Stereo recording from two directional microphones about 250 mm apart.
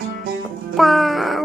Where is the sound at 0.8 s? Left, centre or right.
Centre.